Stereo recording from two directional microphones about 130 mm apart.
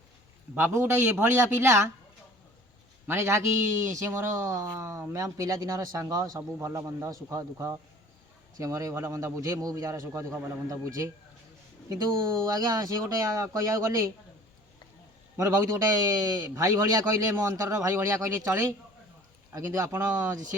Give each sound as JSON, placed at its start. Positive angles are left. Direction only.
{"t": 0.5, "sound": "speech", "side_deg": -15}
{"t": 3.1, "sound": "speech", "side_deg": -20}
{"t": 12.5, "sound": "speech", "side_deg": -30}
{"t": 15.4, "sound": "speech", "side_deg": -25}